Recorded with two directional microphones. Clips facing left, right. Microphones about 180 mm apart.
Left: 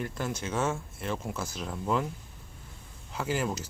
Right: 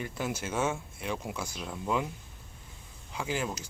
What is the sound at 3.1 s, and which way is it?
Speech, 5° left (ahead or behind).